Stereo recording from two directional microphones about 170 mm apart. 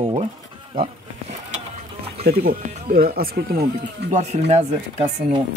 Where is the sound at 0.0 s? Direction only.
30° right (ahead or behind).